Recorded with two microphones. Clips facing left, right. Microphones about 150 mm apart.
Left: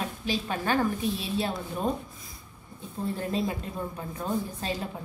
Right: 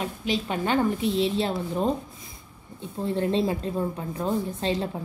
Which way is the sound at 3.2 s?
25° right (ahead or behind).